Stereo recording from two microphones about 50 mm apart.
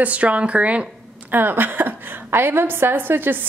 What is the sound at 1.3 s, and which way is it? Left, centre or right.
A woman's voice, right.